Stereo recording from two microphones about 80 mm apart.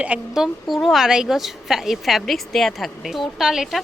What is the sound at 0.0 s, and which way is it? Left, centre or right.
A woman's voice, centre.